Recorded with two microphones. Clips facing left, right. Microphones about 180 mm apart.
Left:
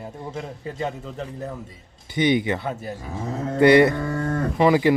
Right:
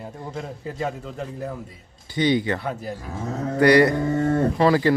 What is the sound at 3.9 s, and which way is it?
Mantra, 20° right (ahead or behind).